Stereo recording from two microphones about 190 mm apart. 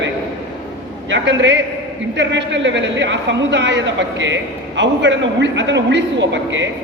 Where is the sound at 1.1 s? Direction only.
70° right (ahead or behind).